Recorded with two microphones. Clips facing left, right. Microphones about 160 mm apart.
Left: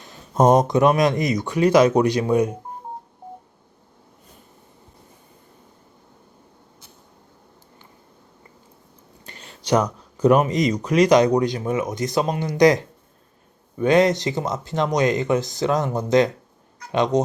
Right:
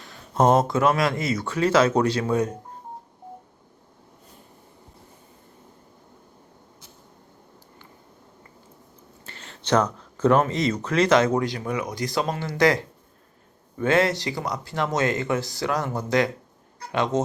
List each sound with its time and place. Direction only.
0.0 s speech: 20° left (ahead or behind)
9.2 s speech: 15° left (ahead or behind)